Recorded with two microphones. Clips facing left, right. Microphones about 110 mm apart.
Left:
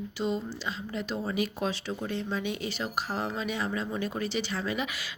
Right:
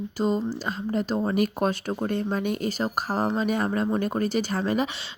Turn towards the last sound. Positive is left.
turn(degrees=-40)  # may be behind; listen again after turning